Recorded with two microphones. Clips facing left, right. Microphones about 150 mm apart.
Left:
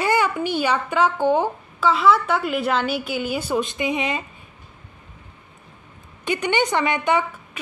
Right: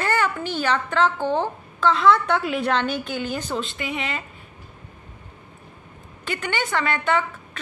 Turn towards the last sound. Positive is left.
turn(degrees=15)  # may be behind; listen again after turning